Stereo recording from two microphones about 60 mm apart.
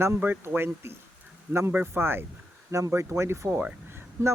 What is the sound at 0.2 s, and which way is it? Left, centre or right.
Speech, right.